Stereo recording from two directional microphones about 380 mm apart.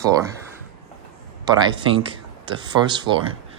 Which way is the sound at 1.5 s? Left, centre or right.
Centre.